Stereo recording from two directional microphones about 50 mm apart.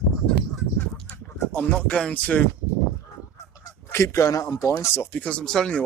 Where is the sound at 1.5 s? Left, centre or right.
Left.